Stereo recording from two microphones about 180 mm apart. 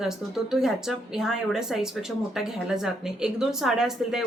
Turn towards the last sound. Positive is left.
turn(degrees=0)  # may be behind; listen again after turning